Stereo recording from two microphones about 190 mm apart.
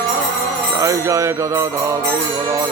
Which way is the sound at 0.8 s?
15° right (ahead or behind).